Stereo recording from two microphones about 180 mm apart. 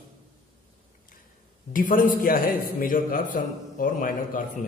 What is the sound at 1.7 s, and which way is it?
A man's voice, 50° left (ahead or behind).